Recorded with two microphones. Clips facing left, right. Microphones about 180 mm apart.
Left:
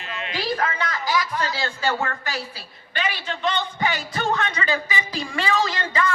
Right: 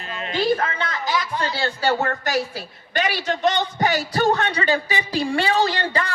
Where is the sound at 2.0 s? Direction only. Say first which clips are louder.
Right 6 dB; 45° right (ahead or behind).